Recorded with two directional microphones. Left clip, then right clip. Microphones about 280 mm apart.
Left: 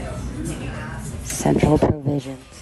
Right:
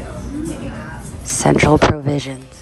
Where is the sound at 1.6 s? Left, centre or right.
Left.